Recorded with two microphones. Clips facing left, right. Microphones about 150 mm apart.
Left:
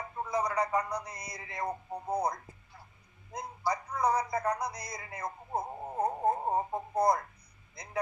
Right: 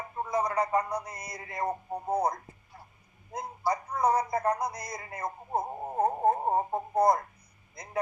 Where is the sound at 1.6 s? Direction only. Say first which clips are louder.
Right 4 dB; 25° right (ahead or behind).